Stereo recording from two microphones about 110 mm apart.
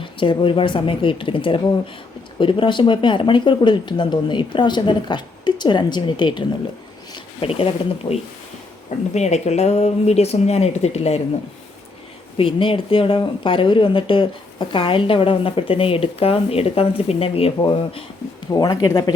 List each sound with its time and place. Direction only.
0.0 s speech: 50° left (ahead or behind)
7.4 s speech: 60° left (ahead or behind)
9.1 s speech: 90° left
12.4 s speech: 50° left (ahead or behind)
17.6 s speech: 45° left (ahead or behind)
18.5 s speech: 35° left (ahead or behind)